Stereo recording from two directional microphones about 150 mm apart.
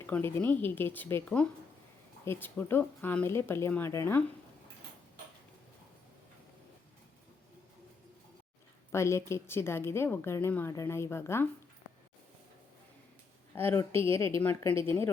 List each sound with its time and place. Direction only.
0.0 s a woman's voice: 15° left (ahead or behind)
8.9 s a woman's voice: 20° left (ahead or behind)
13.6 s a woman's voice: 15° left (ahead or behind)